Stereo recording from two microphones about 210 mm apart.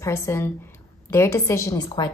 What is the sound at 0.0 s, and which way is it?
A woman's voice, 15° left (ahead or behind).